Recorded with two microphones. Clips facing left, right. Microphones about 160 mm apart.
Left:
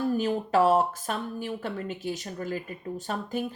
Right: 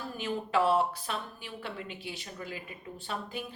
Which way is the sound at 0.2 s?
40° left (ahead or behind).